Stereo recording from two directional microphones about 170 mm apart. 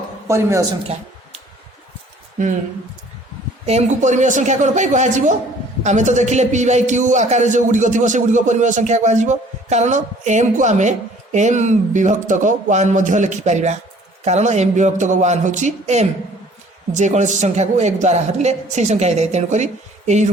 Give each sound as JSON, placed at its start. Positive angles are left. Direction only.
{"t": 0.3, "sound": "a man's voice", "side_deg": -15}
{"t": 3.7, "sound": "a man's voice", "side_deg": -40}